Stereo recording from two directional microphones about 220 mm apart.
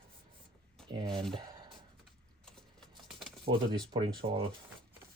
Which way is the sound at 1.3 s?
20° right (ahead or behind).